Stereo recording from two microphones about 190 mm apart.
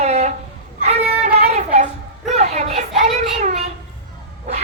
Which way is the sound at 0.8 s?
35° right (ahead or behind).